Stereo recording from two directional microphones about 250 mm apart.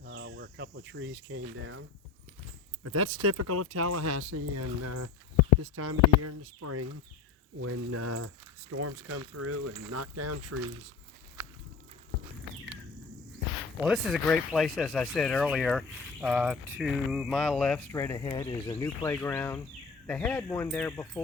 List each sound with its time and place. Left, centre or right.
0.0 s cricket: right
2.8 s speech: right
5.6 s speech: right
13.8 s speech: centre